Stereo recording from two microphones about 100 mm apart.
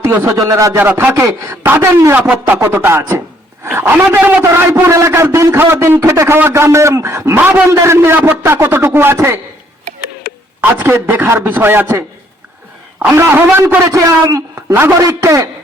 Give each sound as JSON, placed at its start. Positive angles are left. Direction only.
{"t": 0.0, "sound": "a man's voice", "side_deg": -25}
{"t": 0.8, "sound": "a man's voice", "side_deg": -20}
{"t": 2.1, "sound": "a sound", "side_deg": -15}
{"t": 2.6, "sound": "a man's voice", "side_deg": -20}
{"t": 7.3, "sound": "a sound", "side_deg": -15}
{"t": 7.7, "sound": "a man's voice", "side_deg": -30}
{"t": 10.6, "sound": "a man's voice", "side_deg": -25}
{"t": 13.8, "sound": "a man's voice", "side_deg": -35}